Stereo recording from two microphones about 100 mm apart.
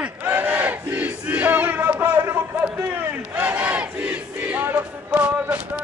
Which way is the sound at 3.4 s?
15° right (ahead or behind).